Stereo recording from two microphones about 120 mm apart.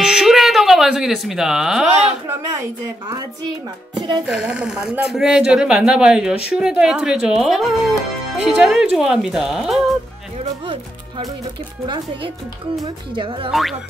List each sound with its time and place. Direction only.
0.0 s a sound: 5° right (ahead or behind)
4.3 s speech: 5° right (ahead or behind)
11.8 s speech: 40° right (ahead or behind)
13.5 s speech: centre (ahead or behind)